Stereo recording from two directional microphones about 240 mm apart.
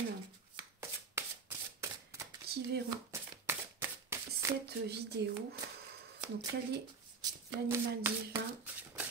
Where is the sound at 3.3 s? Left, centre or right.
Centre.